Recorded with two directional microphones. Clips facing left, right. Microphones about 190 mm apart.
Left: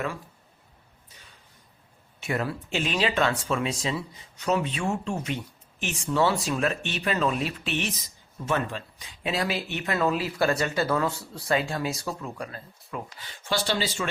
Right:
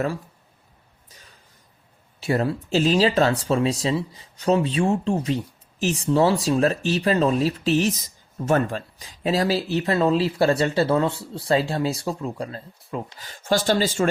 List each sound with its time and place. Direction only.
2.2 s speech: 30° right (ahead or behind)
13.1 s speech: 40° right (ahead or behind)